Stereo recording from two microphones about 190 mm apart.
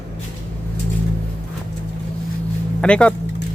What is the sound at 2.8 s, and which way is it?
Speech, 5° left (ahead or behind).